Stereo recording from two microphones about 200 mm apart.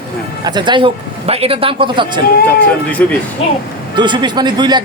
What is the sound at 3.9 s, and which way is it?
Speech, 20° right (ahead or behind).